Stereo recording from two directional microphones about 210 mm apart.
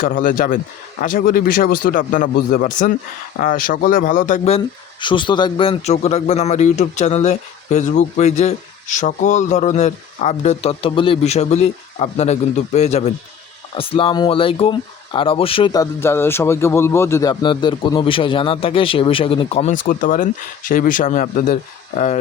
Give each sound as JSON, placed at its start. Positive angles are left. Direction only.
{"t": 0.0, "sound": "speech", "side_deg": 40}